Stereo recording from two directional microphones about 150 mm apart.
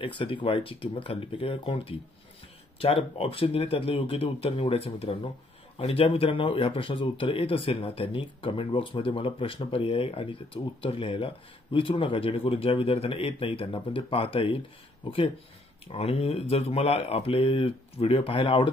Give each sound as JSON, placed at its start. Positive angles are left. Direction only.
{"t": 0.0, "sound": "speech", "side_deg": 35}